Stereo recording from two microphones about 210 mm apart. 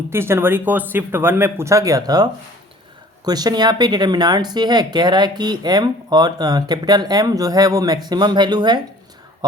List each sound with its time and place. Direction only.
0.1 s speech: 10° right (ahead or behind)